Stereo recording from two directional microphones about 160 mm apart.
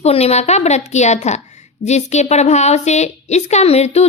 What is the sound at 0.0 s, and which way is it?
Speech, 40° left (ahead or behind).